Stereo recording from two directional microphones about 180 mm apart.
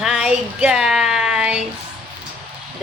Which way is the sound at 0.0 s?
5° right (ahead or behind).